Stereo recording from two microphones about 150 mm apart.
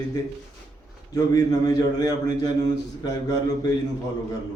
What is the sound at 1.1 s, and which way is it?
A man's voice, 25° left (ahead or behind).